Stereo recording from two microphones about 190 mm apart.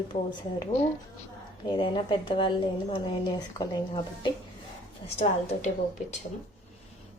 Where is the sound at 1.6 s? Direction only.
25° left (ahead or behind).